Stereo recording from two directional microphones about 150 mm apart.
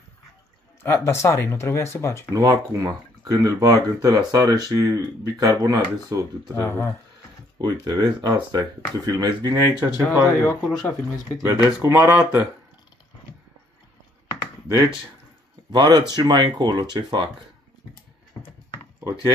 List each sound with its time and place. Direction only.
0.8 s speech: 15° left (ahead or behind)
2.3 s speech: 20° right (ahead or behind)
6.5 s speech: 20° left (ahead or behind)
7.8 s speech: 30° right (ahead or behind)
10.1 s speech: 25° left (ahead or behind)
11.4 s speech: 20° right (ahead or behind)
15.7 s speech: 30° right (ahead or behind)